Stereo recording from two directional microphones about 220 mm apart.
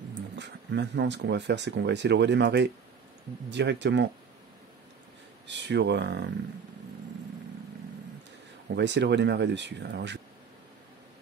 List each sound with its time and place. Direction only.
0.4 s speech: 50° right (ahead or behind)
5.5 s speech: 55° right (ahead or behind)
8.7 s speech: 50° right (ahead or behind)